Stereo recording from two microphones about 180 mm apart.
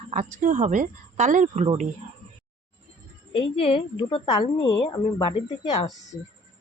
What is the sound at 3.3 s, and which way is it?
A woman's voice, 30° left (ahead or behind).